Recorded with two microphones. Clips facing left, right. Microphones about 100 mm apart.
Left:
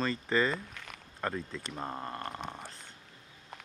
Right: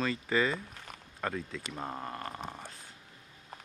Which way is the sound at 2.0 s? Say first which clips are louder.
Left 1 dB; 10° right (ahead or behind).